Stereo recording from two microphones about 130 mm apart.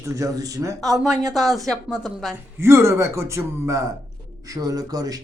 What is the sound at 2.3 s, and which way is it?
Speech, 20° right (ahead or behind).